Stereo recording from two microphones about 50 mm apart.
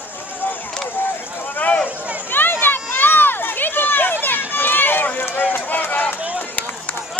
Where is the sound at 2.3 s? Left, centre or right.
Left.